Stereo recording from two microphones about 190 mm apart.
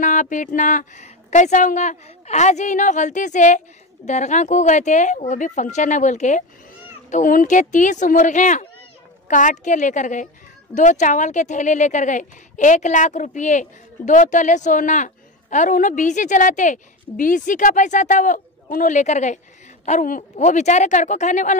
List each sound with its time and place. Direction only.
0.0 s speech: 40° left (ahead or behind)